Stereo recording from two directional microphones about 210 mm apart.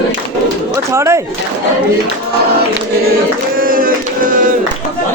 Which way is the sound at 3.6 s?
40° right (ahead or behind).